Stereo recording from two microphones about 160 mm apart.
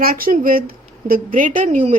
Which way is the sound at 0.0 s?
65° right (ahead or behind).